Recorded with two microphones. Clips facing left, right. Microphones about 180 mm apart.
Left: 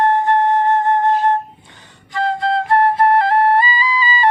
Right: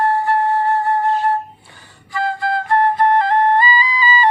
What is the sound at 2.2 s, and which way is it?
Flute, 20° left (ahead or behind).